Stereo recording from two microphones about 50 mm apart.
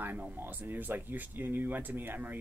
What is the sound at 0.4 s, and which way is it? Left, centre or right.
Speech, right.